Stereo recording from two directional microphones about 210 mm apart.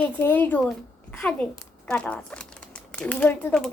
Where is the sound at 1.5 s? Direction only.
10° left (ahead or behind).